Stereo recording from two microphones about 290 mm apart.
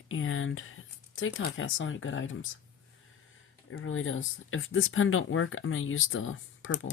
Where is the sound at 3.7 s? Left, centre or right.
Left.